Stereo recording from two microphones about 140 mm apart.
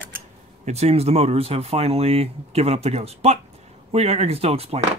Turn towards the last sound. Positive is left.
turn(degrees=-45)  # may be behind; listen again after turning